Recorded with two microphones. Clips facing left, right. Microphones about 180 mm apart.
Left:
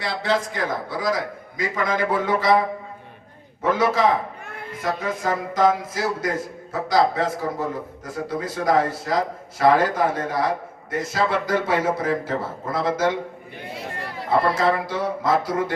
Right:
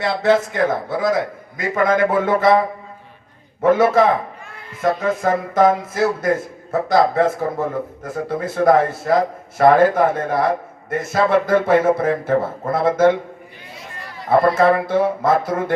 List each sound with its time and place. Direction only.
0.0 s speech: 55° right (ahead or behind)
3.6 s speech: 55° right (ahead or behind)
14.3 s speech: 55° right (ahead or behind)